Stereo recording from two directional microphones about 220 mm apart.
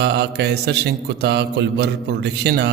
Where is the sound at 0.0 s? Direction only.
50° right (ahead or behind).